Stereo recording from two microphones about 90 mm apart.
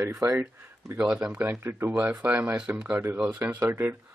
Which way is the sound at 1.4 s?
25° right (ahead or behind).